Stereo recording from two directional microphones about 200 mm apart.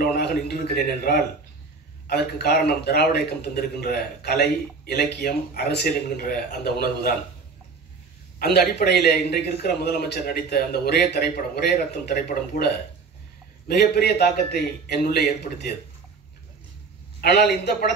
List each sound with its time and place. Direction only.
0.0 s a man's voice: 55° left (ahead or behind)
8.4 s a man's voice: 50° left (ahead or behind)
17.2 s a man's voice: 55° left (ahead or behind)